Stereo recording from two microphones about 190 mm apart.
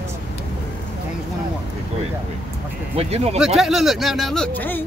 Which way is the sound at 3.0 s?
35° right (ahead or behind).